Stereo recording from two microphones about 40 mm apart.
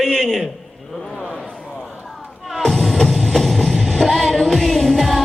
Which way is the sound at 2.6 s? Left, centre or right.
Centre.